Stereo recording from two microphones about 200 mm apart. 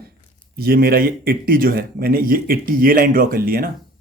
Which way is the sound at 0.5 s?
50° right (ahead or behind).